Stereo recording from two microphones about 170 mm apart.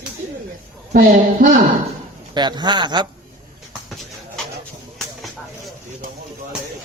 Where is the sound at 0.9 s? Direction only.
60° right (ahead or behind).